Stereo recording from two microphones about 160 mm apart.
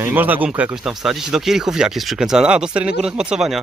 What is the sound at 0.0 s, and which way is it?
Speech, 10° right (ahead or behind).